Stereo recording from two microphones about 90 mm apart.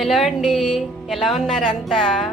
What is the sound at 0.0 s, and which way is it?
Speech, centre (ahead or behind).